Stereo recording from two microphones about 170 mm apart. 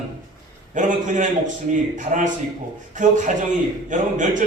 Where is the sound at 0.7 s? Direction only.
50° right (ahead or behind).